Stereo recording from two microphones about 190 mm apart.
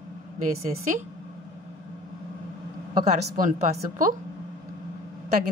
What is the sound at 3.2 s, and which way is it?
Speech, 45° right (ahead or behind).